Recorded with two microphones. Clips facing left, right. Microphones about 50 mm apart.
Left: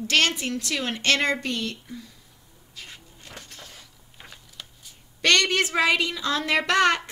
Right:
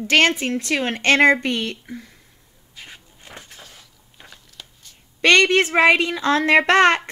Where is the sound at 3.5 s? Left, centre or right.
Centre.